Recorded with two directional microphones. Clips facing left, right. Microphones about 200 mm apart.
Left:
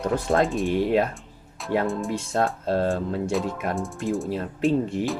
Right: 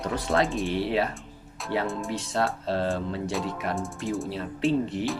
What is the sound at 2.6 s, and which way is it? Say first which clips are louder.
Speech: left 4 dB; 45° left (ahead or behind).